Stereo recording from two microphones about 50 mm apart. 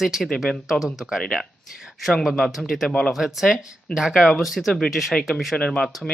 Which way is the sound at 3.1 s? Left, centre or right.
Centre.